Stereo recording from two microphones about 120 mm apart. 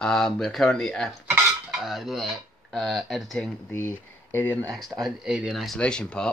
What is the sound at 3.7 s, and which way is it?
Speech, 20° left (ahead or behind).